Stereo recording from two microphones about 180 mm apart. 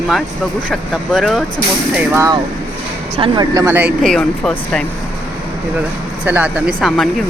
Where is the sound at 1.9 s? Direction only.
15° right (ahead or behind).